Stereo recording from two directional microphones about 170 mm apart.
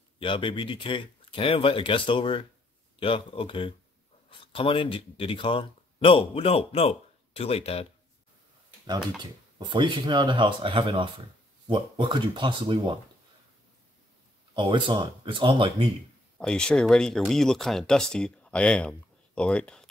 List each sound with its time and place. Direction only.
0.2 s speech: 30° left (ahead or behind)
9.6 s speech: 25° right (ahead or behind)
14.5 s speech: 30° right (ahead or behind)
16.3 s speech: 5° left (ahead or behind)